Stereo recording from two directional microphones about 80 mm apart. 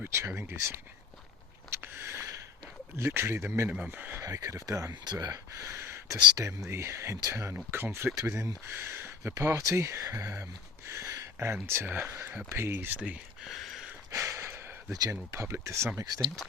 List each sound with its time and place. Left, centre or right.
0.0 s speech: right
1.7 s a sound: right
2.9 s speech: right
3.7 s speech: right
4.2 s speech: right
6.7 s speech: right
7.5 s speech: right
13.4 s a sound: centre
14.1 s a sound: right
15.1 s speech: right
16.0 s speech: right